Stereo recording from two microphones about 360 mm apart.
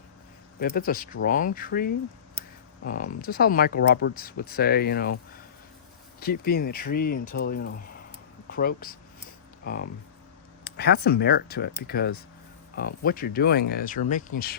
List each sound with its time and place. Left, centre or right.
0.6 s speech: left
6.4 s speech: left
10.6 s speech: left